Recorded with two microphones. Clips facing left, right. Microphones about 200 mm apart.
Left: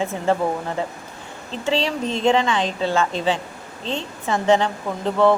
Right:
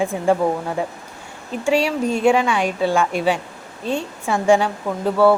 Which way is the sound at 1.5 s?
10° right (ahead or behind).